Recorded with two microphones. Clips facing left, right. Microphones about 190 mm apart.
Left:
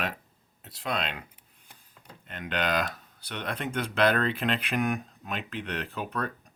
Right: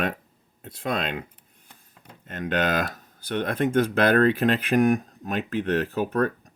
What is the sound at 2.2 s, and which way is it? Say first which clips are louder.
Speech: right 5 dB; 45° right (ahead or behind).